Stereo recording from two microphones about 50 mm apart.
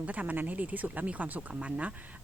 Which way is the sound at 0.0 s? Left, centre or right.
Right.